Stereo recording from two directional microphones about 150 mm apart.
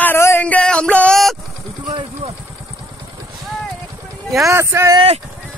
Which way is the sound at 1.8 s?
35° right (ahead or behind).